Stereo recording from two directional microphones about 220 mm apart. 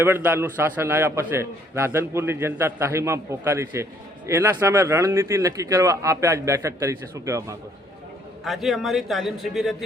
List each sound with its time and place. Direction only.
0.0 s a man's voice: 10° right (ahead or behind)
8.4 s a man's voice: centre (ahead or behind)